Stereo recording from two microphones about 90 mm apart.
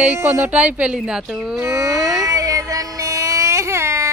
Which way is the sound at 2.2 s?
40° right (ahead or behind).